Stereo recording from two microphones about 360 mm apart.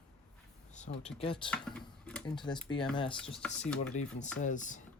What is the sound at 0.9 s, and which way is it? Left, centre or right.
Speech, centre.